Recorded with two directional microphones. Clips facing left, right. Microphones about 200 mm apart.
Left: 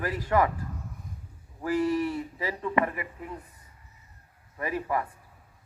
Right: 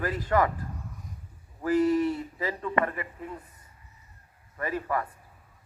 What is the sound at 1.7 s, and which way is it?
Speech, 20° right (ahead or behind).